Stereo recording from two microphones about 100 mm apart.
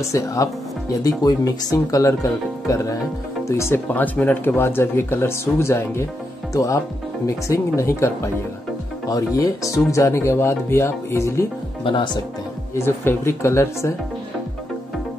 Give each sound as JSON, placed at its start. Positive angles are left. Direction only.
{"t": 0.1, "sound": "speech", "side_deg": 30}
{"t": 11.8, "sound": "speech", "side_deg": 50}
{"t": 12.7, "sound": "speech", "side_deg": 25}